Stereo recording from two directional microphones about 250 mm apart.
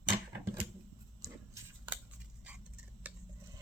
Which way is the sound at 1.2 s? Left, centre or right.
Centre.